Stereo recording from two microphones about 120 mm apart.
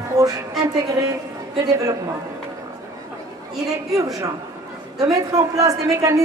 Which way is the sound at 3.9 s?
30° right (ahead or behind).